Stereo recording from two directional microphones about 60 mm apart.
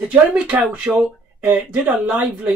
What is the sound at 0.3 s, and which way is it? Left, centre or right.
Speech, right.